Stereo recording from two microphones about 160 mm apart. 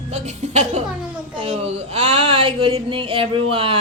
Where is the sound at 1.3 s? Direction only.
35° right (ahead or behind).